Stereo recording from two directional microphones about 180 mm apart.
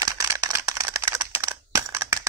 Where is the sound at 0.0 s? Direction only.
20° right (ahead or behind).